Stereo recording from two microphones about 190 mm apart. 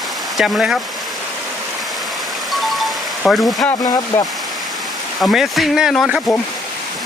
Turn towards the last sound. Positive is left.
turn(degrees=0)  # may be behind; listen again after turning